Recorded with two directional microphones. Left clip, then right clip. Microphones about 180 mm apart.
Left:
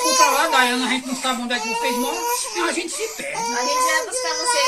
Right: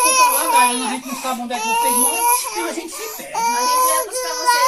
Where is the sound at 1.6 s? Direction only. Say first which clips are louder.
Right 7 dB; 30° right (ahead or behind).